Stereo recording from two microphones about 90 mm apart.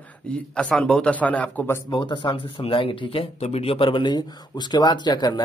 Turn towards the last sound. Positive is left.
turn(degrees=55)  # may be behind; listen again after turning